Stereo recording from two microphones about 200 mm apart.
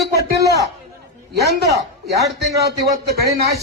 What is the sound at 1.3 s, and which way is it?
A man's voice, 55° right (ahead or behind).